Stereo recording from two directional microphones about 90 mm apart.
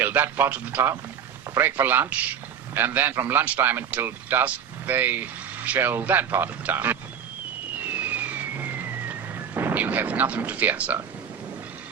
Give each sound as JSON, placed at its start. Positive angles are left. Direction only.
{"t": 0.0, "sound": "a man's voice", "side_deg": -20}
{"t": 7.9, "sound": "vehicle", "side_deg": -20}
{"t": 9.6, "sound": "a man's voice", "side_deg": -25}